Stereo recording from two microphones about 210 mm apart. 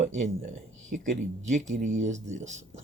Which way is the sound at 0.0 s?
35° right (ahead or behind).